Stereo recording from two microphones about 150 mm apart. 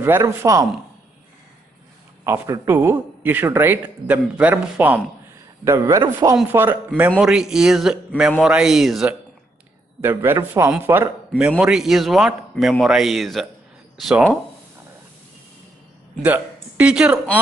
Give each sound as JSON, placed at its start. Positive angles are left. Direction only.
{"t": 0.0, "sound": "speech", "side_deg": -15}
{"t": 2.2, "sound": "speech", "side_deg": -20}
{"t": 7.2, "sound": "a man's voice", "side_deg": -5}
{"t": 10.0, "sound": "speech", "side_deg": -15}
{"t": 11.5, "sound": "a man's voice", "side_deg": -5}
{"t": 16.2, "sound": "speech", "side_deg": -10}